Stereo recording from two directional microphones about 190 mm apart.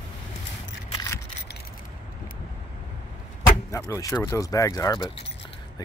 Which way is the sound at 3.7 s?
15° left (ahead or behind).